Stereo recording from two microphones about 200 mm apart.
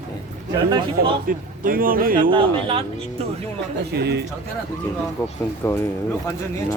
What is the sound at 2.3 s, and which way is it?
Speech, 25° right (ahead or behind).